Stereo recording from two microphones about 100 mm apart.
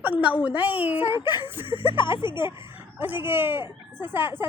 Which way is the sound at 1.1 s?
50° left (ahead or behind).